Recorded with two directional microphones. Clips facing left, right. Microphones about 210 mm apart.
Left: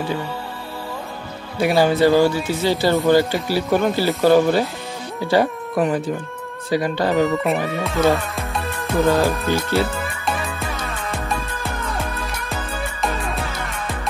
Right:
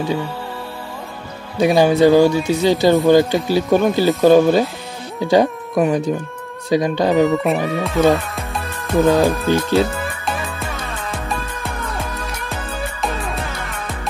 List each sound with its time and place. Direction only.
1.6 s speech: 15° right (ahead or behind)
7.2 s speech: centre (ahead or behind)
9.5 s speech: 15° right (ahead or behind)
9.8 s music: centre (ahead or behind)